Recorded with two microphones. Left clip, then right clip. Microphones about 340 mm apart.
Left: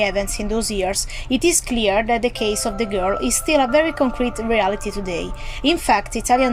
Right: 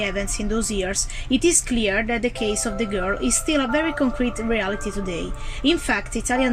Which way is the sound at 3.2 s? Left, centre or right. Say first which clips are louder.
Left 5 dB; centre.